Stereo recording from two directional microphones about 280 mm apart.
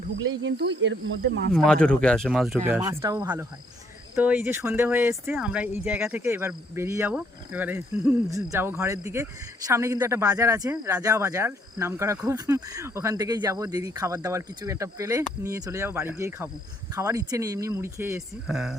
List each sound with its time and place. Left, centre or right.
0.2 s speech: right
1.5 s speech: centre